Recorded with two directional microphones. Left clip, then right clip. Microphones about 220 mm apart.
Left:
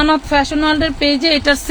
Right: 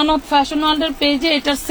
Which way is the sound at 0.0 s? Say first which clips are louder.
Left 1 dB; 15° left (ahead or behind).